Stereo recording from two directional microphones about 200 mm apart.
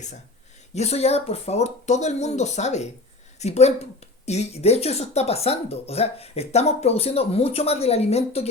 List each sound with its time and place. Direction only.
0.7 s speech: 35° left (ahead or behind)